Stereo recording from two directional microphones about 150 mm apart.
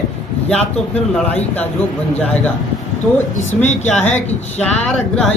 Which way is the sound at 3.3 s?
50° left (ahead or behind).